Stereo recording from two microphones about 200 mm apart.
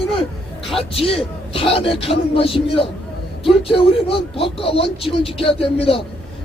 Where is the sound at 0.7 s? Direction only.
30° left (ahead or behind).